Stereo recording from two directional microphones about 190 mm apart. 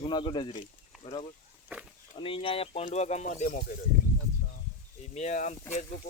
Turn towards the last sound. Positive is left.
turn(degrees=35)  # may be behind; listen again after turning